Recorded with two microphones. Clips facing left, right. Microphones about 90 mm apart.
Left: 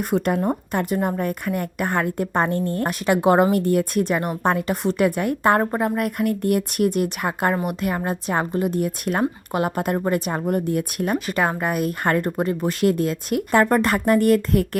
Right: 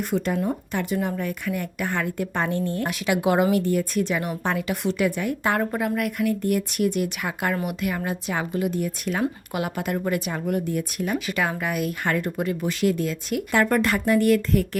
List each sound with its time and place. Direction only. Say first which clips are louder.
0.0 s speech: left 3 dB; 50° left (ahead or behind)
5.7 s a woman's voice: left 3 dB; 35° left (ahead or behind); by 9.2 s 50° left (ahead or behind)
9.2 s speech: left 4 dB; 40° left (ahead or behind)